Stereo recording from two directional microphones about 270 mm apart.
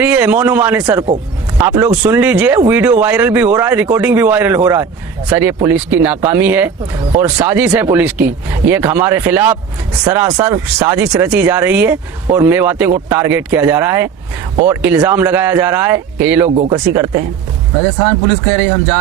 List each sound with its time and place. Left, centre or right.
0.0 s speech: centre
16.6 s speech: centre